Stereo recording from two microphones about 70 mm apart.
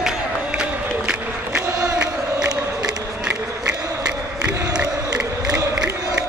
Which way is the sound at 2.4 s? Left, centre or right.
Right.